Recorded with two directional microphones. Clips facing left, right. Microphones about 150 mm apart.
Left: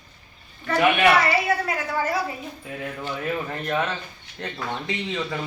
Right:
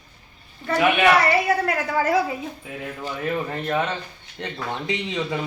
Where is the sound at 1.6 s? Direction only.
80° right.